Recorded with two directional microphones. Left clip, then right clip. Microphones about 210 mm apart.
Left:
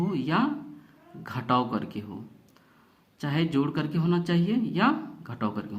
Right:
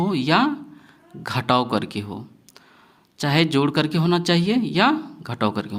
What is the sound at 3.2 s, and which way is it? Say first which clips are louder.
Speech: right 8 dB; 35° right (ahead or behind).